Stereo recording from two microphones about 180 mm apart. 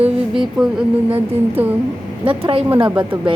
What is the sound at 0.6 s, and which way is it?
Speech, centre (ahead or behind).